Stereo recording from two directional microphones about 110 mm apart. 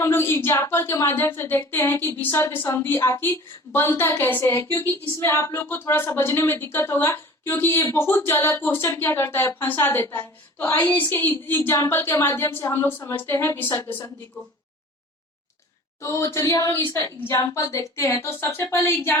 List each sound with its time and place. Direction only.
0.0 s speech: 20° left (ahead or behind)
16.0 s speech: 25° left (ahead or behind)